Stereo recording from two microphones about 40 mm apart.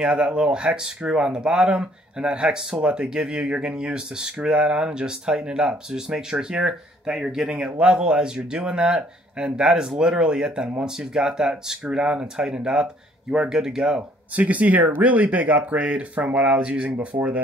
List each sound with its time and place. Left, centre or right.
0.0 s speech: right
7.5 s speech: right
14.3 s speech: right